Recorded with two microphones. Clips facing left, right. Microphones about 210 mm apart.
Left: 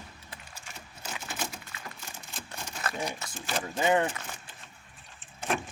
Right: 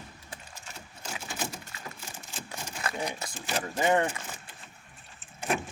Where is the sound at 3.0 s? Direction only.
15° right (ahead or behind).